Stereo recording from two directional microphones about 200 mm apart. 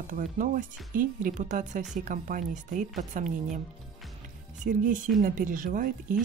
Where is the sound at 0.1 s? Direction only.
40° right (ahead or behind).